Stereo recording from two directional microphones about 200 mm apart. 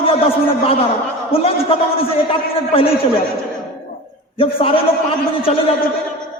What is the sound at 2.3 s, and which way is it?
Speech, 30° left (ahead or behind).